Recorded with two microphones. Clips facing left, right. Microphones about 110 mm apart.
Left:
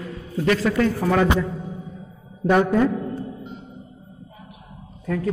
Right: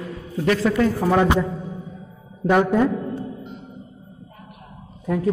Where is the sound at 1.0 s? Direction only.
15° right (ahead or behind).